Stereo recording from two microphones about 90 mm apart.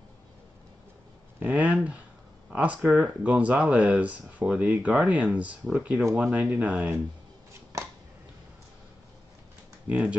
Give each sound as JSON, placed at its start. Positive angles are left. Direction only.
{"t": 1.4, "sound": "speech", "side_deg": -15}
{"t": 7.7, "sound": "a sound", "side_deg": -35}
{"t": 9.8, "sound": "speech", "side_deg": -15}